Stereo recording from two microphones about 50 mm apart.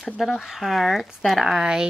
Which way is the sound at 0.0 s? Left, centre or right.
Centre.